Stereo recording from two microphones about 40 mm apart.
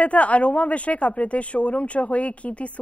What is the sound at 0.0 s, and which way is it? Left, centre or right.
Speech, left.